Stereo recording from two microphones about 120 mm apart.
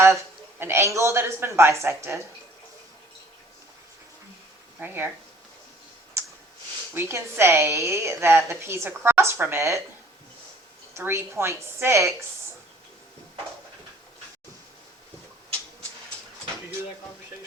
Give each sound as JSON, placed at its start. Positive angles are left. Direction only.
{"t": 0.6, "sound": "a woman's voice", "side_deg": -20}
{"t": 4.8, "sound": "speech", "side_deg": -20}
{"t": 6.2, "sound": "clicking", "side_deg": -20}
{"t": 6.9, "sound": "a woman's voice", "side_deg": -20}
{"t": 10.9, "sound": "a woman's voice", "side_deg": -20}